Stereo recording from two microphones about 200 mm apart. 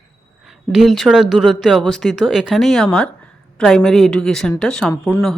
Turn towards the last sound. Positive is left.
turn(degrees=10)  # may be behind; listen again after turning